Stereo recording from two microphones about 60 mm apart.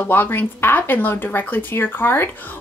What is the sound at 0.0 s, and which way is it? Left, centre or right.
A woman's voice, left.